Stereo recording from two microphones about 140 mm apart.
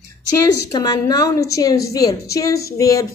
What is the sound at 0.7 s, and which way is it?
A woman's voice, 30° left (ahead or behind).